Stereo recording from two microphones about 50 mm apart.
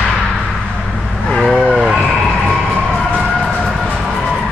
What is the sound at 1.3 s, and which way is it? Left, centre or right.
Vehicle, centre.